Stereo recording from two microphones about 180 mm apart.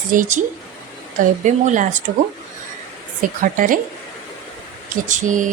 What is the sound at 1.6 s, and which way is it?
Speech, 45° right (ahead or behind).